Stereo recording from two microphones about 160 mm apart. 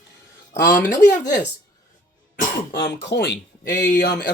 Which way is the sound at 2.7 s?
90° left.